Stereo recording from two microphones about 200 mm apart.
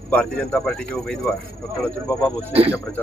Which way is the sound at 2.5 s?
30° right (ahead or behind).